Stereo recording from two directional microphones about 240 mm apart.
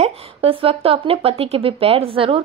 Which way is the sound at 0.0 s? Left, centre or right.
Right.